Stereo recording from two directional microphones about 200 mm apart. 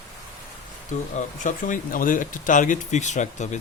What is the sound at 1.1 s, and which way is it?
Speech, 40° left (ahead or behind).